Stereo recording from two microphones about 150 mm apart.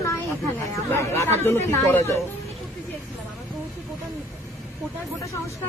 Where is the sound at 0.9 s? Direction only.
15° left (ahead or behind).